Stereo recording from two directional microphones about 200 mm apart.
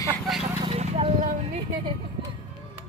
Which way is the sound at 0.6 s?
30° right (ahead or behind).